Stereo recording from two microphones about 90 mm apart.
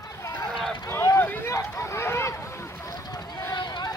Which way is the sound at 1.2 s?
25° left (ahead or behind).